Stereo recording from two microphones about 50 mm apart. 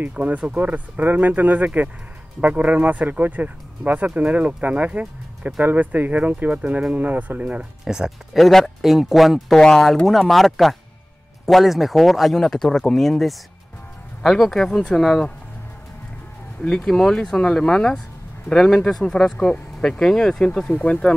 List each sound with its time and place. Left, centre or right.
0.1 s speech: right
7.8 s speech: centre
8.3 s speech: centre
9.6 s speech: centre
16.6 s speech: centre